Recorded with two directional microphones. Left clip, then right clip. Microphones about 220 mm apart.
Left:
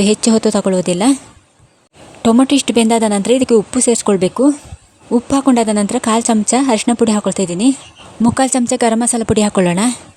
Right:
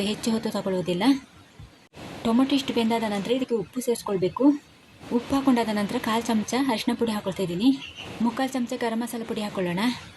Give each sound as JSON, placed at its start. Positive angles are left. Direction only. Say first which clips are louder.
{"t": 0.0, "sound": "a woman's voice", "louder": "left 15 dB", "side_deg": 45}
{"t": 2.2, "sound": "a woman's voice", "louder": "left 12 dB", "side_deg": 50}